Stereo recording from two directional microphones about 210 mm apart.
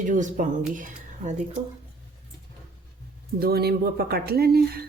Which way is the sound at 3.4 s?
45° right (ahead or behind).